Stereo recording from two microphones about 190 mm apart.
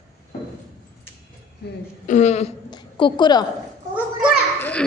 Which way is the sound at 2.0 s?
40° left (ahead or behind).